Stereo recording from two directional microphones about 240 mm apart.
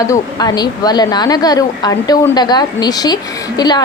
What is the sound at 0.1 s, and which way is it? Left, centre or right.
A woman's voice, centre.